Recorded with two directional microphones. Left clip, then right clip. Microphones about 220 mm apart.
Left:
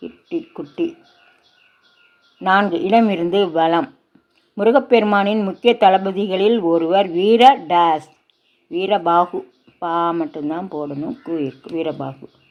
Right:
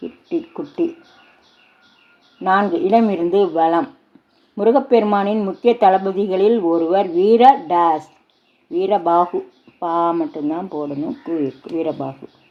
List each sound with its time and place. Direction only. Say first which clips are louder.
0.0 s a sound: right 2 dB; 15° left (ahead or behind)
2.4 s speech: even; 25° left (ahead or behind)
10.8 s speech: right 1 dB; 35° left (ahead or behind)
11.3 s speech: right 2 dB; 20° left (ahead or behind)